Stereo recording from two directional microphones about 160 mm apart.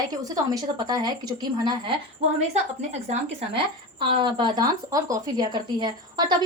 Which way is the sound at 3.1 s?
40° right (ahead or behind).